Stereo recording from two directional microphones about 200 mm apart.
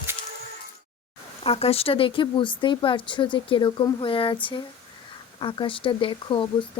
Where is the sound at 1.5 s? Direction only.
30° left (ahead or behind).